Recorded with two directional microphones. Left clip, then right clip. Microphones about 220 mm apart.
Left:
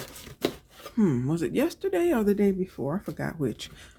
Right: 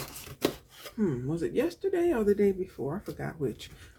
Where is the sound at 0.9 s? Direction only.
50° left (ahead or behind).